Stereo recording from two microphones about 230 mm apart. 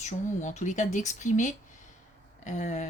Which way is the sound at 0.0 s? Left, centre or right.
Left.